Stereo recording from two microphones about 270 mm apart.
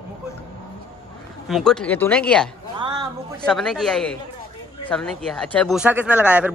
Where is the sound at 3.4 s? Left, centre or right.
Centre.